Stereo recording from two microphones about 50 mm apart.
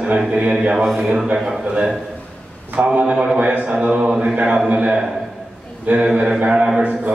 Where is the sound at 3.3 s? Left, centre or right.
Right.